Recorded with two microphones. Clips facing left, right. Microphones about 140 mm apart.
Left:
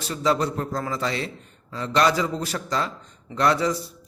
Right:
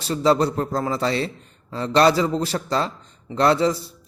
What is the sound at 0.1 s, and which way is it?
A man's voice, 30° right (ahead or behind).